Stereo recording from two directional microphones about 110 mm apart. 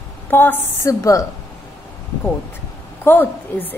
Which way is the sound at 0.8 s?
30° left (ahead or behind).